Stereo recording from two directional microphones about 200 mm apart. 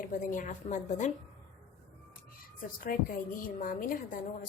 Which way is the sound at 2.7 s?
45° left (ahead or behind).